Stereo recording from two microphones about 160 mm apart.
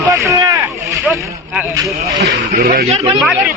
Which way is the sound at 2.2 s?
75° right (ahead or behind).